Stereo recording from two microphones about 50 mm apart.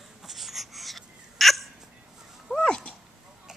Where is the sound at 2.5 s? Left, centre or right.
Centre.